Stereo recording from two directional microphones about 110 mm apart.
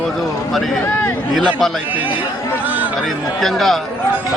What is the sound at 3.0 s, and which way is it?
Speech, centre (ahead or behind).